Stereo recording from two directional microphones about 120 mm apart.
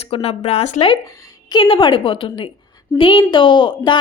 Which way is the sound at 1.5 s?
40° left (ahead or behind).